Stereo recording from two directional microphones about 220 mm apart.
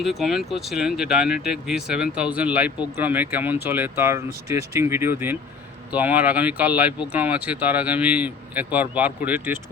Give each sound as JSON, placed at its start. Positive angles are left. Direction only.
{"t": 0.0, "sound": "speech", "side_deg": 0}